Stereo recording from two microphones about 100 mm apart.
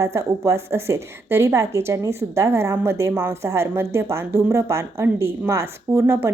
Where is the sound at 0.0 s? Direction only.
30° right (ahead or behind).